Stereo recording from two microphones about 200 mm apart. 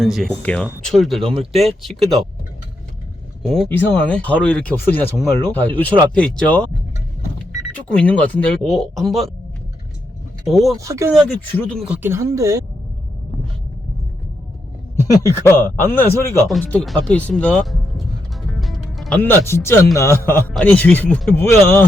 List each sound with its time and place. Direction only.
0.0 s speech: centre (ahead or behind)
3.4 s speech: centre (ahead or behind)
7.9 s speech: 5° left (ahead or behind)
10.4 s speech: centre (ahead or behind)
10.8 s speech: 15° right (ahead or behind)
11.1 s speech: 5° left (ahead or behind)
11.9 s speech: 10° right (ahead or behind)
14.9 s speech: 15° left (ahead or behind)